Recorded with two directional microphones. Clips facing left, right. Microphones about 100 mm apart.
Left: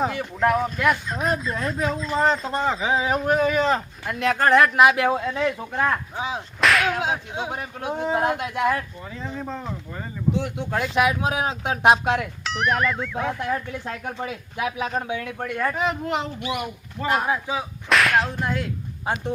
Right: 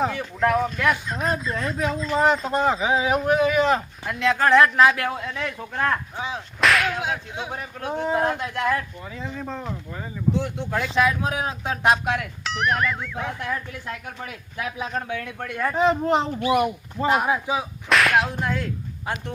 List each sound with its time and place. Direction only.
0.0 s speech: 5° left (ahead or behind)
2.5 s speech: 15° right (ahead or behind)
2.7 s speech: centre (ahead or behind); by 5.5 s 25° left (ahead or behind)
5.5 s speech: 10° left (ahead or behind)
6.6 s whip: centre (ahead or behind)
7.0 s speech: 25° left (ahead or behind)
9.5 s speech: centre (ahead or behind); by 12.2 s 20° left (ahead or behind)
12.5 s speech: centre (ahead or behind)
13.1 s speech: 25° left (ahead or behind)
15.4 s speech: centre (ahead or behind)
15.7 s speech: 30° right (ahead or behind)
17.8 s speech: centre (ahead or behind)